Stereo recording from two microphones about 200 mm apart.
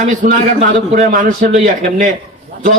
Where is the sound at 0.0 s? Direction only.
40° right (ahead or behind).